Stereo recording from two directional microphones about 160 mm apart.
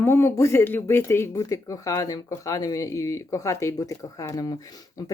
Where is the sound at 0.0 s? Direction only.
15° left (ahead or behind).